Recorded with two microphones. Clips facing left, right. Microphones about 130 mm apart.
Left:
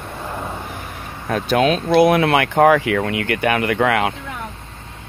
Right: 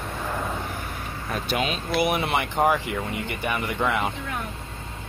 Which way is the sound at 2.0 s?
90° left.